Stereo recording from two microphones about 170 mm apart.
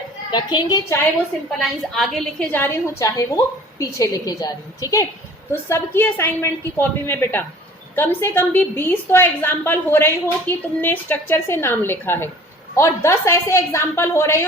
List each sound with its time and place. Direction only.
0.3 s a woman's voice: 25° left (ahead or behind)
1.5 s a woman's voice: centre (ahead or behind)
2.5 s a woman's voice: 15° left (ahead or behind)